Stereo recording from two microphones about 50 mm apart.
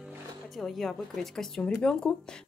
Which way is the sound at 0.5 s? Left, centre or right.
Centre.